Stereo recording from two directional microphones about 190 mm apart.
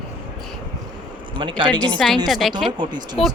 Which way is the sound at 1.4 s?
25° right (ahead or behind).